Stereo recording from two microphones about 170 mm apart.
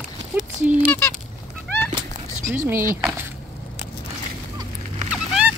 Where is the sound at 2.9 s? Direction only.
5° right (ahead or behind).